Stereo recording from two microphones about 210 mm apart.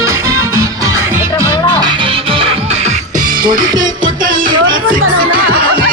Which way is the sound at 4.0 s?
40° right (ahead or behind).